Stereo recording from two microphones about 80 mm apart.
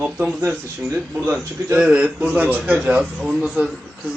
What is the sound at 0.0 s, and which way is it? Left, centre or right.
A man's voice, centre.